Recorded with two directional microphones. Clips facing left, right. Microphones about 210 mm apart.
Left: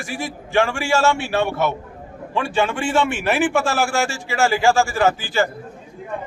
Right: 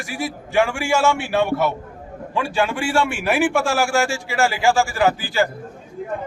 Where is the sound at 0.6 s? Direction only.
15° right (ahead or behind).